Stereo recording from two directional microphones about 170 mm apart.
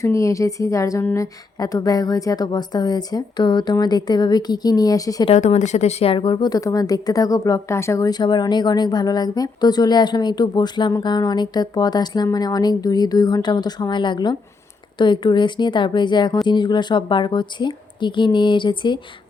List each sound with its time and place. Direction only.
0.0 s speech: 20° left (ahead or behind)
5.3 s speech: 40° left (ahead or behind)